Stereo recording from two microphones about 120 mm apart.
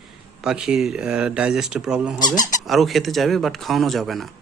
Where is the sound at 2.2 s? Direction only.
35° left (ahead or behind).